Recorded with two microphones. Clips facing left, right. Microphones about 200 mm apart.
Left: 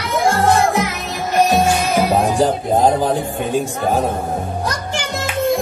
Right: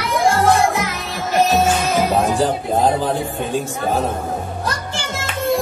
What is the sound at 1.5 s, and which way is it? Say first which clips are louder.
Music: left 1 dB; 15° left (ahead or behind).